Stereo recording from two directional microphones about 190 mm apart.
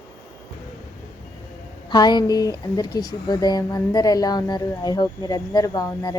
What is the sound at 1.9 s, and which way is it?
Speech, 20° left (ahead or behind).